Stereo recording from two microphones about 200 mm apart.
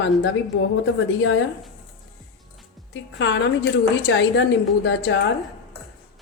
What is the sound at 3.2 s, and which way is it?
A woman's voice, 65° left (ahead or behind).